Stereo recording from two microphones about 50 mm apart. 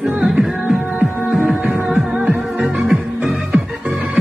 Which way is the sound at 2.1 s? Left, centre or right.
Right.